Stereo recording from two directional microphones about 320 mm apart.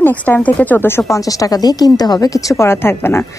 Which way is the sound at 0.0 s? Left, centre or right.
Centre.